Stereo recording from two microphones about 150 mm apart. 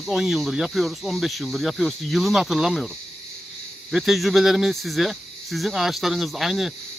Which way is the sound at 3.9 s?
Centre (ahead or behind).